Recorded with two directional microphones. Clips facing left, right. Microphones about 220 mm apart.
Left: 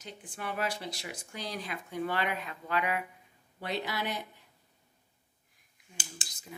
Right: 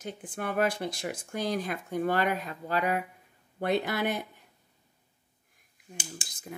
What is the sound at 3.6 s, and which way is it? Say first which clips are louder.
Speech: right 7 dB; 50° right (ahead or behind).